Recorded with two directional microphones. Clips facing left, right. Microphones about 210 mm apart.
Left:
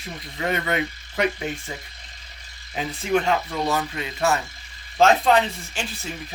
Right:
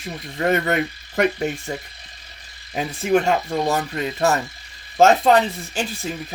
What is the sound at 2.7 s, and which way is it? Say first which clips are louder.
Speech: right 4 dB; 45° right (ahead or behind).